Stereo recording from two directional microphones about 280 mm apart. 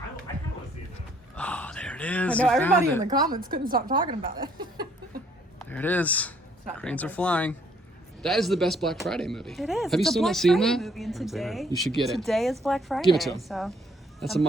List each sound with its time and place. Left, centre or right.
1.4 s gasp: centre
3.0 s a woman's voice: centre
3.2 s a woman's voice: right
3.9 s a woman's voice: centre
4.2 s a woman's voice: right
5.6 s speech: centre